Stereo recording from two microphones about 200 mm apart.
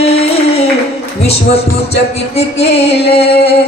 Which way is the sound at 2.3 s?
30° left (ahead or behind).